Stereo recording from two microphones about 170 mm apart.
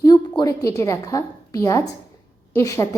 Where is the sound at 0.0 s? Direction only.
25° left (ahead or behind).